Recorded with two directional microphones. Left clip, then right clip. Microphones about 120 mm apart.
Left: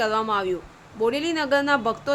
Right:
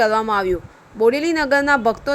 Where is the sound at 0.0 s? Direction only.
50° right (ahead or behind).